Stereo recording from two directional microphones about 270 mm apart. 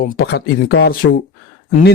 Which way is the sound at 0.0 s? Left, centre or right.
Left.